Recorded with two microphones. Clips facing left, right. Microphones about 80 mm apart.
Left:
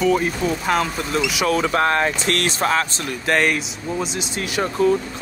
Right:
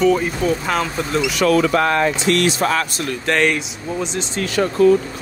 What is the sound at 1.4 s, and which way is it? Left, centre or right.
Speech, left.